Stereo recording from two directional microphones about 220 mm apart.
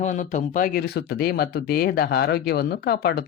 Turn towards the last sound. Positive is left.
turn(degrees=45)  # may be behind; listen again after turning